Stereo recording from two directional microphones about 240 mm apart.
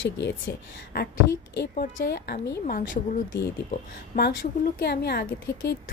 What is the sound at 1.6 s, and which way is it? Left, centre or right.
A woman's voice, left.